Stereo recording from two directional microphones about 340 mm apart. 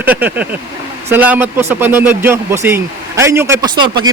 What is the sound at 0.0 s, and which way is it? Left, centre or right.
Speech, centre.